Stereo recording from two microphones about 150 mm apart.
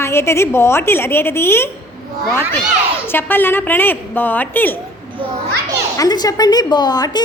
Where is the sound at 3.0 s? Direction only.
15° left (ahead or behind).